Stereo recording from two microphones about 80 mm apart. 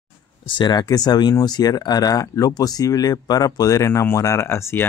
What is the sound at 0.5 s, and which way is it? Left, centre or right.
Speech, left.